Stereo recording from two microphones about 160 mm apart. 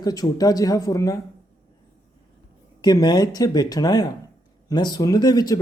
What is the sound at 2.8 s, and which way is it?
Speech, 25° left (ahead or behind).